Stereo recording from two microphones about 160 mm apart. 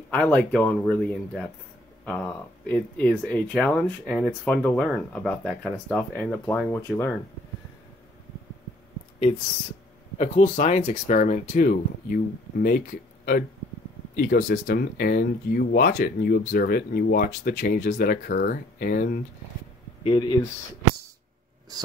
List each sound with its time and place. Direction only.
0.1 s speech: 5° left (ahead or behind)
10.1 s speech: 45° left (ahead or behind); by 19.2 s 65° left (ahead or behind)
20.0 s speech: 30° left (ahead or behind)